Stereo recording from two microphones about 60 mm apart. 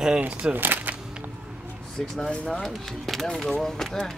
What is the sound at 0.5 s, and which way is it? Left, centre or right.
Speech, right.